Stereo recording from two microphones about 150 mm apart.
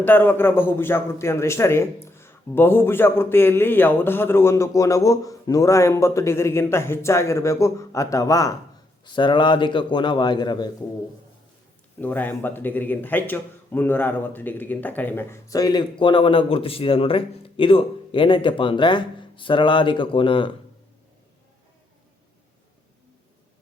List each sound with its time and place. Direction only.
0.0 s a man's voice: 15° left (ahead or behind); by 10.7 s 30° left (ahead or behind)
11.9 s a man's voice: 10° left (ahead or behind); by 20.5 s 35° left (ahead or behind)